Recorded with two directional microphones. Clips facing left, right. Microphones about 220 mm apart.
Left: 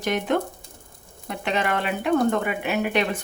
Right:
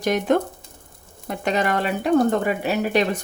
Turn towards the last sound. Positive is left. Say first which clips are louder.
# right 3 dB
turn(degrees=-40)  # may be behind; listen again after turning